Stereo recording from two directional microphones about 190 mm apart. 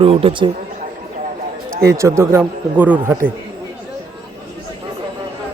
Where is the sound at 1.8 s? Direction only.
15° right (ahead or behind).